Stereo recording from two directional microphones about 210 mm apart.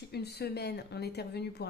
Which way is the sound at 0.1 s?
50° left (ahead or behind).